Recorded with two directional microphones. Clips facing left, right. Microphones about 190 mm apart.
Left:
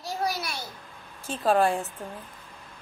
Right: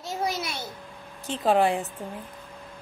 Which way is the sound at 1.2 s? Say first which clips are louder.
Right 1 dB; 20° right (ahead or behind).